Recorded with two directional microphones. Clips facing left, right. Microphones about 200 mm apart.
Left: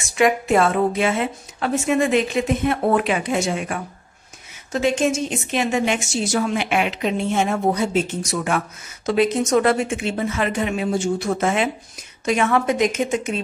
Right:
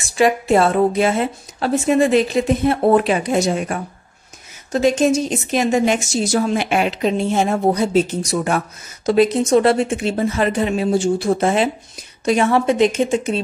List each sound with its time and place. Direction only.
0.1 s a woman's voice: 35° right (ahead or behind)